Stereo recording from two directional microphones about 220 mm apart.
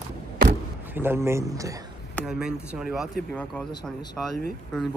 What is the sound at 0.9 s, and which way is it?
Speech, 10° right (ahead or behind).